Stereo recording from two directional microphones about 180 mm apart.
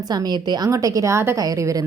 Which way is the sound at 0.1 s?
25° right (ahead or behind).